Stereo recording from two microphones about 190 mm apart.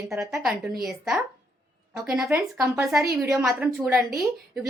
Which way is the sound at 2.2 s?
15° right (ahead or behind).